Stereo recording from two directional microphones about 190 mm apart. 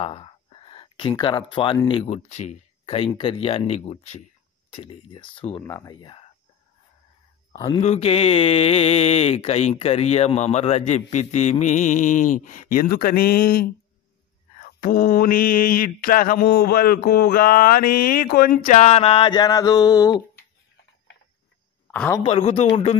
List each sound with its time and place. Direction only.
0.0 s a sound: 30° left (ahead or behind)
1.9 s speech: 30° left (ahead or behind)
7.5 s speech: 20° left (ahead or behind)
7.8 s speech: 35° left (ahead or behind); by 13.7 s 50° left (ahead or behind)
14.6 s mantra: 50° left (ahead or behind); by 20.2 s 20° left (ahead or behind)
21.9 s a man's voice: 5° left (ahead or behind)
22.2 s speech: 30° left (ahead or behind)